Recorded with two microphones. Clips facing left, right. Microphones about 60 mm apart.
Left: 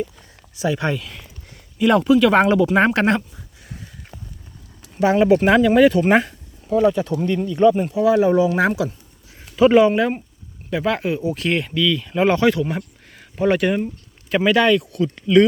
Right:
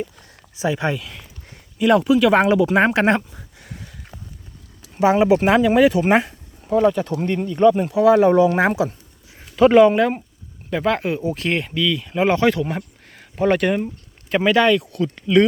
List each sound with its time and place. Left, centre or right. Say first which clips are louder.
0.5 s speech: even; right
0.9 s speech: even; centre
3.2 s a sound: right 1 dB; right
4.9 s speech: even; centre
6.7 s speech: even; right
7.3 s speech: even; right
7.7 s speech: right 2 dB; right
8.5 s speech: right 1 dB; right
9.6 s speech: right 1 dB; right
10.7 s speech: right 1 dB; right; by 12.4 s centre
12.4 s speech: left 1 dB; right
14.3 s speech: even; right